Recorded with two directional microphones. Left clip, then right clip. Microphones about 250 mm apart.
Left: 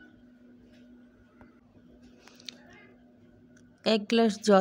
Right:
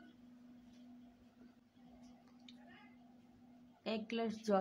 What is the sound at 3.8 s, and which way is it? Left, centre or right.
Speech, left.